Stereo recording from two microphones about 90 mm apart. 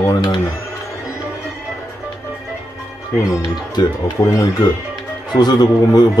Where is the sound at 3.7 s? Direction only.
50° left (ahead or behind).